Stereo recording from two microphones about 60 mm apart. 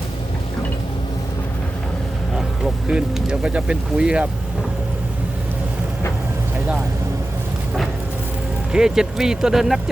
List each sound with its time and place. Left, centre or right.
2.8 s speech: centre
8.7 s speech: centre